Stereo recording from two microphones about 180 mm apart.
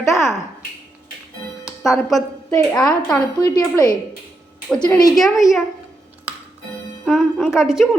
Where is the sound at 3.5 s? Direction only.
25° left (ahead or behind).